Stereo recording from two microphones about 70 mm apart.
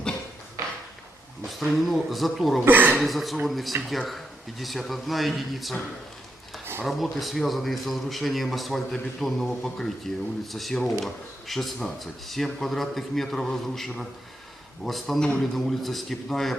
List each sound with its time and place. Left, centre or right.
1.5 s speech: centre
2.6 s speech: right
3.0 s speech: centre
6.8 s speech: centre